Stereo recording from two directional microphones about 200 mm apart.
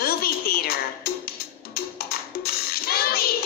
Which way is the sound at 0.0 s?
50° left (ahead or behind).